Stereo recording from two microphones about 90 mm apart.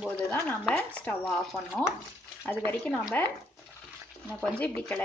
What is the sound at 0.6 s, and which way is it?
Speech, 10° left (ahead or behind).